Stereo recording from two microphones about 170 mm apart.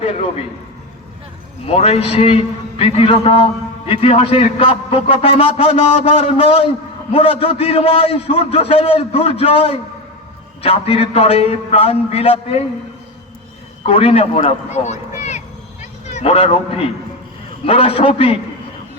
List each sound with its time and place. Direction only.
1.6 s a man's voice: 35° left (ahead or behind)
13.8 s a man's voice: 35° left (ahead or behind)